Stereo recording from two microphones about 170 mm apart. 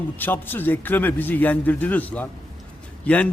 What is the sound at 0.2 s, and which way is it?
A man's voice, 10° left (ahead or behind).